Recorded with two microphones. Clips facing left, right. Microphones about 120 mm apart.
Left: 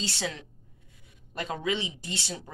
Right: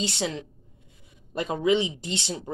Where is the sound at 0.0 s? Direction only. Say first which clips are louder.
Right 5 dB; 20° right (ahead or behind).